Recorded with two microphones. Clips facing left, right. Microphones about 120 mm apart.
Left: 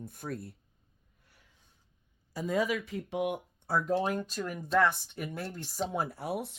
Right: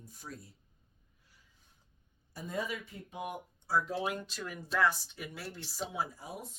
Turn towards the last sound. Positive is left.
turn(degrees=70)  # may be behind; listen again after turning